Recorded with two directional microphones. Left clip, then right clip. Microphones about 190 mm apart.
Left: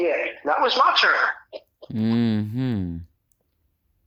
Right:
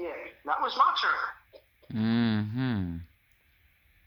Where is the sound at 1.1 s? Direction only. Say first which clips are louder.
Left 12 dB; 40° left (ahead or behind).